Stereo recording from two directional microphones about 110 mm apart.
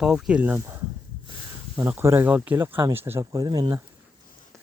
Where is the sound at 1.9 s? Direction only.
20° right (ahead or behind).